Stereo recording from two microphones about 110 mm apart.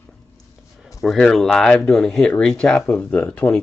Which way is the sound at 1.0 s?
5° left (ahead or behind).